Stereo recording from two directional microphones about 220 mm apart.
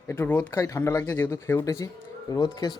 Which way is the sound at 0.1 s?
10° left (ahead or behind).